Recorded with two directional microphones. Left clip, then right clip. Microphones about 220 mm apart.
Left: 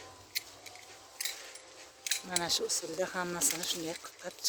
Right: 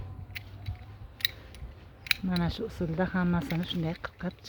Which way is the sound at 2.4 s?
5° right (ahead or behind).